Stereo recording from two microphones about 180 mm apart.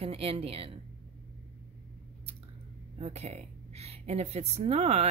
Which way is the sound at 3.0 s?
35° right (ahead or behind).